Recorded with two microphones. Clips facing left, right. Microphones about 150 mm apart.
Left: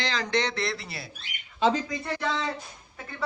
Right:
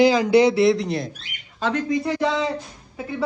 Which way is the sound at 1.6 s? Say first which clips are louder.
Even; 60° right (ahead or behind).